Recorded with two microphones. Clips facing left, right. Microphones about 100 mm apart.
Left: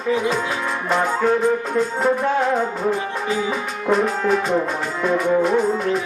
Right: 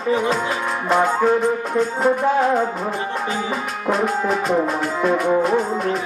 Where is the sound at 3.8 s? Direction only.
Centre (ahead or behind).